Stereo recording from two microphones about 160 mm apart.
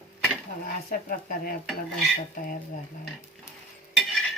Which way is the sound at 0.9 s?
60° left (ahead or behind).